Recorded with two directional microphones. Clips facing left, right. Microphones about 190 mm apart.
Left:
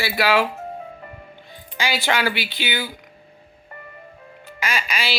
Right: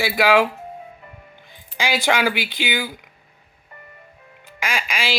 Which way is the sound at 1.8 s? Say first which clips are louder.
Right 2 dB; 15° right (ahead or behind).